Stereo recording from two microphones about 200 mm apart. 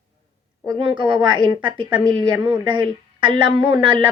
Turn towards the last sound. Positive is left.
turn(degrees=-25)  # may be behind; listen again after turning